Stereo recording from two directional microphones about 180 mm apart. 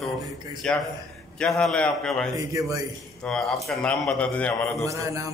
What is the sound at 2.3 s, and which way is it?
Speech, 20° right (ahead or behind).